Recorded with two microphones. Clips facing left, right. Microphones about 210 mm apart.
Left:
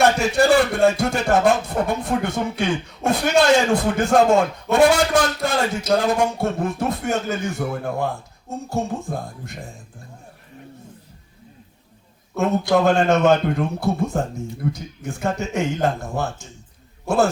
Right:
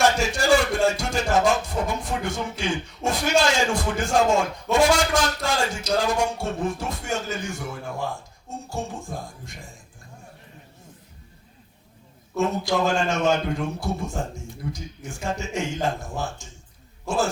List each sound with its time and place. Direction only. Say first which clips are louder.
0.0 s speech: left 5 dB; 60° left (ahead or behind)
12.4 s speech: left 5 dB; 60° left (ahead or behind)